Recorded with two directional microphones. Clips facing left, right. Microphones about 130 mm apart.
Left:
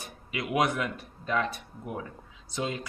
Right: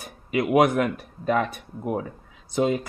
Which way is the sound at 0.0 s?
55° right (ahead or behind).